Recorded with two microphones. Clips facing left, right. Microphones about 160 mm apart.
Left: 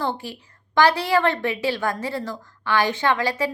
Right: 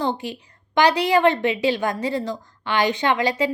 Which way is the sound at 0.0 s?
20° right (ahead or behind).